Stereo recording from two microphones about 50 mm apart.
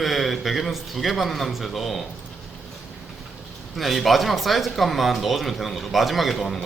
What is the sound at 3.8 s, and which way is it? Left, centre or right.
Speech, centre.